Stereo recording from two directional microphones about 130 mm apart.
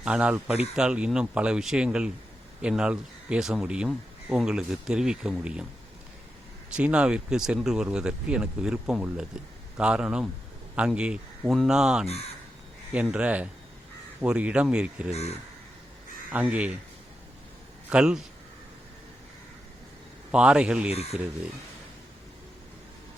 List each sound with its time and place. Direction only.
0.0 s speech: 10° right (ahead or behind)
6.7 s speech: 10° right (ahead or behind)
15.1 s speech: 55° left (ahead or behind)
16.3 s speech: 10° right (ahead or behind)
17.8 s speech: 5° right (ahead or behind)
20.3 s speech: 10° right (ahead or behind)
20.9 s speech: 55° left (ahead or behind)